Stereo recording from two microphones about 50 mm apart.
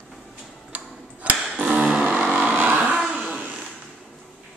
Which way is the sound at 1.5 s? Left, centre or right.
Right.